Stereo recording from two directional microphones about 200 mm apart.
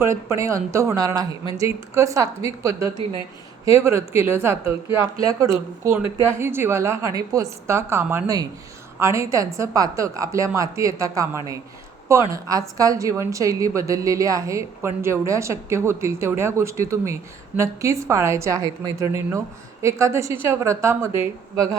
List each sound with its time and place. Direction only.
0.0 s a woman's voice: 15° right (ahead or behind)